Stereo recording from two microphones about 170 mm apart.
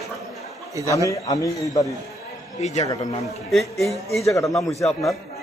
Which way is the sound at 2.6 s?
40° left (ahead or behind).